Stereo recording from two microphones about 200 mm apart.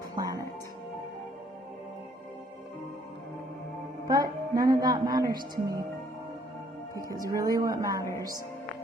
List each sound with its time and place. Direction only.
0.2 s music: 20° right (ahead or behind)
4.0 s a woman's voice: 20° right (ahead or behind)
6.9 s speech: 15° right (ahead or behind)